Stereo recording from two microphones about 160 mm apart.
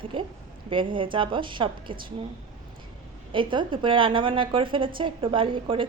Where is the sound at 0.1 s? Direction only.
30° right (ahead or behind).